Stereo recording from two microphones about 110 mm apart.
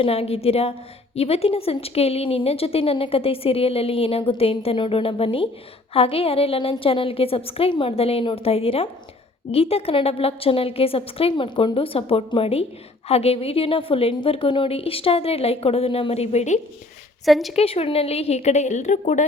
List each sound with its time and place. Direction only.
0.0 s speech: 65° left (ahead or behind); by 16.6 s 85° left
17.2 s speech: centre (ahead or behind)
17.5 s a woman's voice: 65° left (ahead or behind); by 19.2 s 90° left